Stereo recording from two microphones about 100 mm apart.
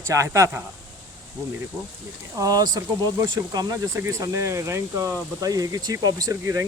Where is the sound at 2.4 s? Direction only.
40° right (ahead or behind).